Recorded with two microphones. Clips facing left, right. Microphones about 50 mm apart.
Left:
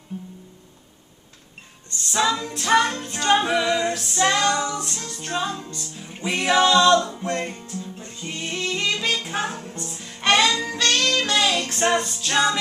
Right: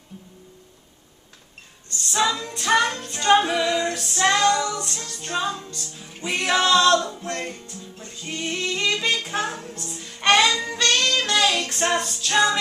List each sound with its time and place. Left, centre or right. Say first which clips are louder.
0.1 s music: left 9 dB; left
2.0 s music: left 1 dB; centre
3.4 s music: left 1 dB; centre
4.4 s music: right 2 dB; centre
4.7 s music: left 1 dB; centre
6.2 s singing: left 2 dB; centre
7.2 s music: left 3 dB; centre
8.3 s music: right 1 dB; centre